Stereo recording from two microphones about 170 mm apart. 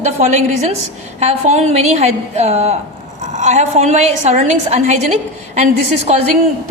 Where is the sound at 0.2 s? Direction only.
40° right (ahead or behind).